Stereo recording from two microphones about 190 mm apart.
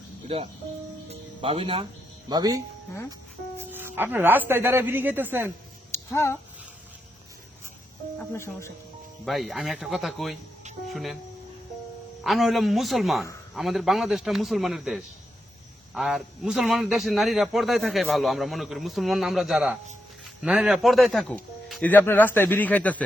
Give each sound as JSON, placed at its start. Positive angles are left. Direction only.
{"t": 0.3, "sound": "speech", "side_deg": -30}
{"t": 5.9, "sound": "a sound", "side_deg": 15}
{"t": 8.2, "sound": "speech", "side_deg": 15}
{"t": 9.2, "sound": "speech", "side_deg": 0}
{"t": 12.2, "sound": "speech", "side_deg": 0}